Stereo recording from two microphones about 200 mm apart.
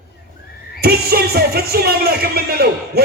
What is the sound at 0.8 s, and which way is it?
Speech, 50° right (ahead or behind).